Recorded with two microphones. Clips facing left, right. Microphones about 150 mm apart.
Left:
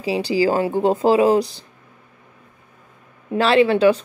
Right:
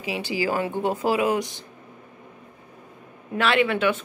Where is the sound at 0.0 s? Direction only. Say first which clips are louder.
Left 8 dB; 35° left (ahead or behind).